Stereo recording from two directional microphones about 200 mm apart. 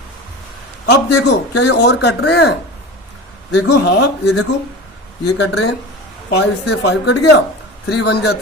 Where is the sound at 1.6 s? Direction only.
60° left (ahead or behind).